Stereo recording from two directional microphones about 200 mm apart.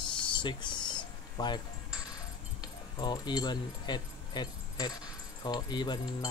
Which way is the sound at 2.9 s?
20° left (ahead or behind).